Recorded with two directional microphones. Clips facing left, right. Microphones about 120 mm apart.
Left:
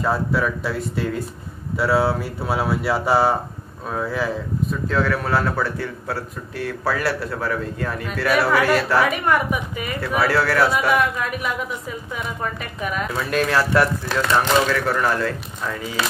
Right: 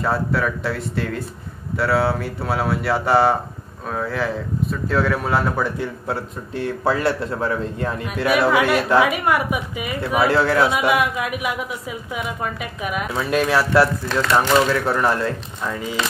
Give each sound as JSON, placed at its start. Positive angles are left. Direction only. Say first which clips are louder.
{"t": 0.0, "sound": "a woman's voice", "louder": "even", "side_deg": 0}
{"t": 13.4, "sound": "speech", "louder": "right 1 dB", "side_deg": -5}
{"t": 14.3, "sound": "a woman's voice", "louder": "right 2 dB", "side_deg": -15}